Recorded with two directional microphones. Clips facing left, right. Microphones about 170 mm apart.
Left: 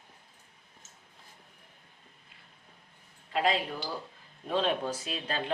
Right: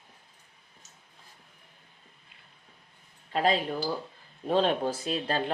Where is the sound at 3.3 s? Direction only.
35° right (ahead or behind).